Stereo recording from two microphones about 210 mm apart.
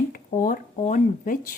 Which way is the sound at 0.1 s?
40° left (ahead or behind).